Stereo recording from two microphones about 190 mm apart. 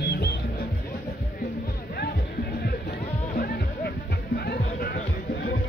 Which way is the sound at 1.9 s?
55° left (ahead or behind).